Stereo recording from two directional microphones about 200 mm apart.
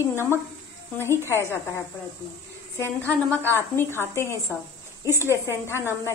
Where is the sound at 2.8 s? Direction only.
10° left (ahead or behind).